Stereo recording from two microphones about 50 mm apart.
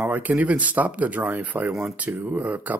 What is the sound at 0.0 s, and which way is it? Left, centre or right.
Speech, right.